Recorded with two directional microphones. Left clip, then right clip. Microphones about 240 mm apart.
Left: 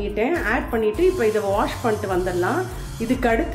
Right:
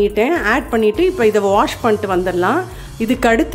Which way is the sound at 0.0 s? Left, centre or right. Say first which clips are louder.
Right 8 dB; right.